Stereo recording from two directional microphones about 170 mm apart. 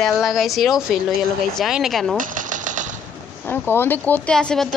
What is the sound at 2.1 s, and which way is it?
Typewriter, 50° right (ahead or behind).